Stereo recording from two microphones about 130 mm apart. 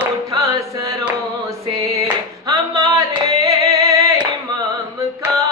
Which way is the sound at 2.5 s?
25° right (ahead or behind).